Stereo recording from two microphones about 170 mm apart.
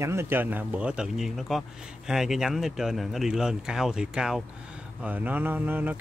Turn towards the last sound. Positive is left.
turn(degrees=-10)  # may be behind; listen again after turning